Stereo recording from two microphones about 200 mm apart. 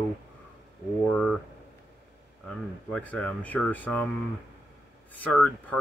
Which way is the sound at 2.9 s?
5° left (ahead or behind).